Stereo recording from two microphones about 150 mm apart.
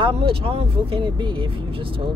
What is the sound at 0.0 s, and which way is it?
Speech, 35° right (ahead or behind).